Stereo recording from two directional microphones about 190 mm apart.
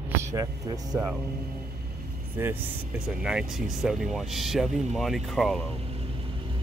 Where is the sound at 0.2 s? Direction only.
15° right (ahead or behind).